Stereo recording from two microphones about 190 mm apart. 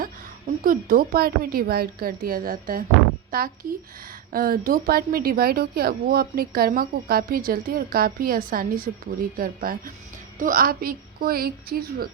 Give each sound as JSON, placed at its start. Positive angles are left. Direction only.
{"t": 0.6, "sound": "speech", "side_deg": -45}